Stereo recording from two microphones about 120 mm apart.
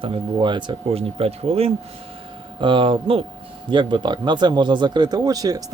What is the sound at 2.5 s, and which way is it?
Speech, 45° right (ahead or behind).